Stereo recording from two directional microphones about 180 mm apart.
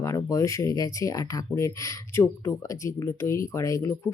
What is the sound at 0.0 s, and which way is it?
Speech, 20° left (ahead or behind).